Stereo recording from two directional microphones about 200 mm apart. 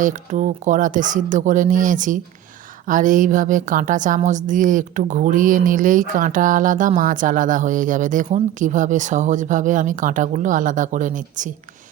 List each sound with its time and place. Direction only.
0.0 s a woman's voice: 40° right (ahead or behind)